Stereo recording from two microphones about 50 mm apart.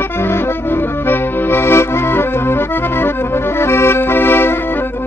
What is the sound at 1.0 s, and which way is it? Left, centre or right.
Accordion, left.